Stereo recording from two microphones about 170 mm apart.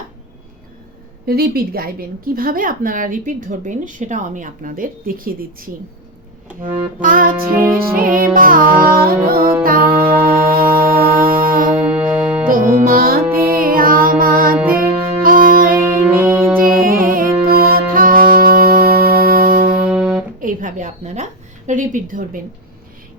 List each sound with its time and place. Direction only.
1.3 s a woman's voice: 65° right (ahead or behind)
6.7 s a woman's voice: 55° right (ahead or behind)
9.4 s music: 10° right (ahead or behind)
9.6 s music: 60° right (ahead or behind)
11.7 s music: 10° right (ahead or behind)
12.5 s music: 55° right (ahead or behind)
13.2 s music: 15° right (ahead or behind)
13.6 s music: 55° right (ahead or behind)
16.2 s music: 10° right (ahead or behind)
16.6 s music: 55° right (ahead or behind)
19.9 s music: centre (ahead or behind)
20.4 s a sound: 50° right (ahead or behind)
21.7 s speech: 50° right (ahead or behind)